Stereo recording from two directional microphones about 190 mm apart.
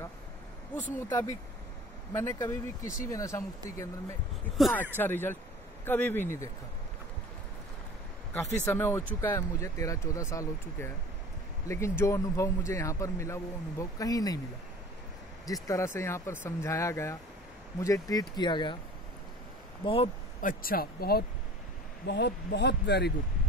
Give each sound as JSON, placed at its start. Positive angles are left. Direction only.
{"t": 0.9, "sound": "a man's voice", "side_deg": 15}
{"t": 4.6, "sound": "a man's voice", "side_deg": 0}
{"t": 8.3, "sound": "a man's voice", "side_deg": 10}
{"t": 15.4, "sound": "a man's voice", "side_deg": 20}
{"t": 19.8, "sound": "speech", "side_deg": 30}
{"t": 20.3, "sound": "speech", "side_deg": 45}